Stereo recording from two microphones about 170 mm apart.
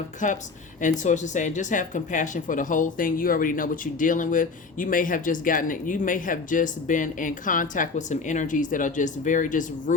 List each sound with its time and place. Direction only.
0.2 s speech: 45° left (ahead or behind)